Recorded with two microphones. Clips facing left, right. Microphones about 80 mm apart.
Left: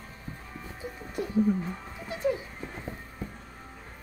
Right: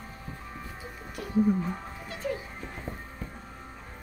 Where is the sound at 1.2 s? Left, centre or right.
Left.